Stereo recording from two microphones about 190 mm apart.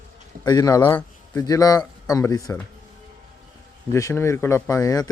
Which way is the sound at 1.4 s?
20° left (ahead or behind).